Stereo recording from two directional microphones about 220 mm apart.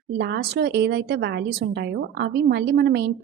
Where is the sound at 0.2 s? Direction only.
50° right (ahead or behind).